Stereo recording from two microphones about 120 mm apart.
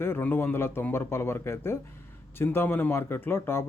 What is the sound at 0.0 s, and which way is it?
A man's voice, 15° left (ahead or behind).